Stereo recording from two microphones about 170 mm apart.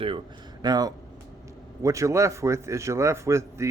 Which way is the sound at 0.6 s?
25° right (ahead or behind).